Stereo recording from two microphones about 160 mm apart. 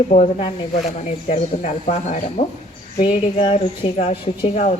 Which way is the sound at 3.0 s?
35° left (ahead or behind).